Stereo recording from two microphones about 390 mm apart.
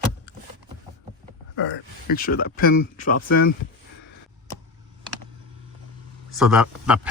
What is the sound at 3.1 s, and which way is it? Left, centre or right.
Speech, left.